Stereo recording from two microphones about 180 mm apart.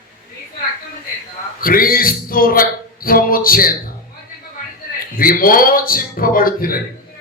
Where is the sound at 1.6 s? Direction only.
50° left (ahead or behind).